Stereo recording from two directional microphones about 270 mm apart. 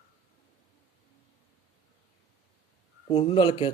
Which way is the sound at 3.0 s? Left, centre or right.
Left.